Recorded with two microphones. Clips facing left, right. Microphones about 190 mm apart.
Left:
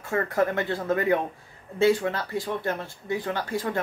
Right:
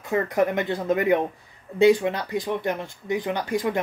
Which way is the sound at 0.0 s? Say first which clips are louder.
Right 2 dB; 15° right (ahead or behind).